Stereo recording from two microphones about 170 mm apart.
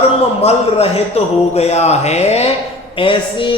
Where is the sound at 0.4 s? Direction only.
35° left (ahead or behind).